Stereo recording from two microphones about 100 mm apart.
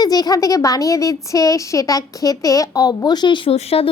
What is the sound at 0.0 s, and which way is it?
A woman's voice, 40° left (ahead or behind).